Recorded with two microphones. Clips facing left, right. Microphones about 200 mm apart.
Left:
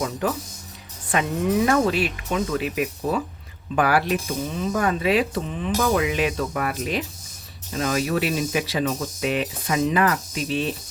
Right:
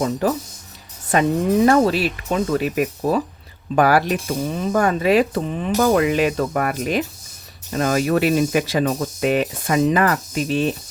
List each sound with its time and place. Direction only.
0.0 s speech: 35° right (ahead or behind)